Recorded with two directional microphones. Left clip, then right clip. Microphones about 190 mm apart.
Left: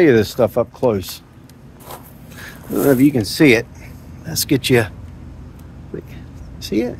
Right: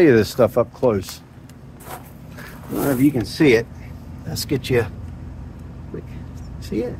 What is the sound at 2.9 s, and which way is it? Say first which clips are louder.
Speech: left 5 dB; 70° left (ahead or behind).